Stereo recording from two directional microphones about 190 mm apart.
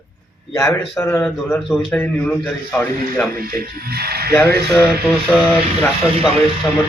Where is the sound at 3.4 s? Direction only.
50° right (ahead or behind).